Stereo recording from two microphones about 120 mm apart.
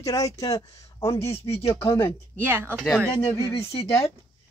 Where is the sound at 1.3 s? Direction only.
60° left (ahead or behind).